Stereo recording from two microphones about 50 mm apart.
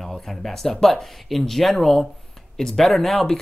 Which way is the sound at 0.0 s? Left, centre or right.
Centre.